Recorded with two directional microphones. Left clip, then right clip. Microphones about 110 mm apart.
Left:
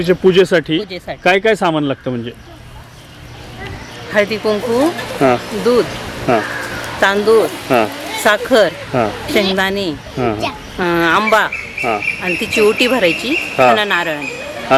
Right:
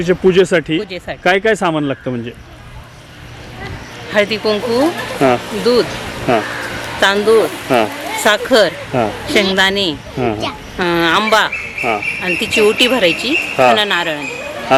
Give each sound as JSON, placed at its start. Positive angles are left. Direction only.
{"t": 0.0, "sound": "speech", "side_deg": 5}
{"t": 4.1, "sound": "speech", "side_deg": -10}
{"t": 4.8, "sound": "speech", "side_deg": 15}
{"t": 5.4, "sound": "speech", "side_deg": -15}
{"t": 6.4, "sound": "a sound", "side_deg": -15}
{"t": 6.9, "sound": "speech", "side_deg": -10}
{"t": 7.5, "sound": "a sound", "side_deg": 10}
{"t": 8.2, "sound": "speech", "side_deg": -10}
{"t": 8.9, "sound": "speech", "side_deg": 15}
{"t": 9.6, "sound": "speech", "side_deg": -10}
{"t": 10.2, "sound": "speech", "side_deg": 15}
{"t": 10.8, "sound": "speech", "side_deg": -10}
{"t": 14.3, "sound": "a sound", "side_deg": 15}